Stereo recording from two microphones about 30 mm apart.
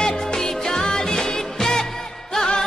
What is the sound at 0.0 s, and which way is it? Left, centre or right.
Music, left.